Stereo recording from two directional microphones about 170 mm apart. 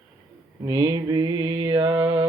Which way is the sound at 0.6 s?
20° right (ahead or behind).